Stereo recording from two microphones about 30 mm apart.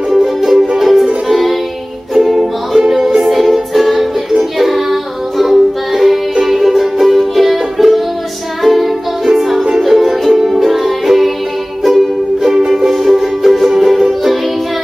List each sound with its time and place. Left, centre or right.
0.1 s music: centre
9.2 s music: centre
9.6 s music: right
9.8 s music: centre
12.5 s music: centre
12.9 s music: centre